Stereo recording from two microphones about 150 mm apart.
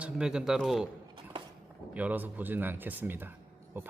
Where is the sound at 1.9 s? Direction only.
10° right (ahead or behind).